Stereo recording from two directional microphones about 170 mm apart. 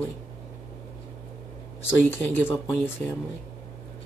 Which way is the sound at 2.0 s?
10° left (ahead or behind).